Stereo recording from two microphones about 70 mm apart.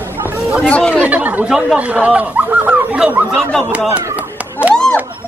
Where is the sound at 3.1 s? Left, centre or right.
Right.